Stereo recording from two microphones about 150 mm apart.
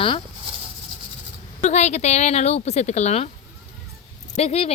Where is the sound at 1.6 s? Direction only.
50° left (ahead or behind).